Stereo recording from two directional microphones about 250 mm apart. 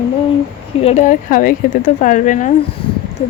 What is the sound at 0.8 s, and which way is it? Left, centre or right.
Speech, left.